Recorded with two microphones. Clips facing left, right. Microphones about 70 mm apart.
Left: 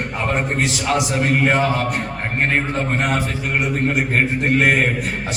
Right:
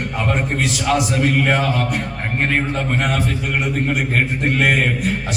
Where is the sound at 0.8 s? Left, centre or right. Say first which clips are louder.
Right 3 dB; left.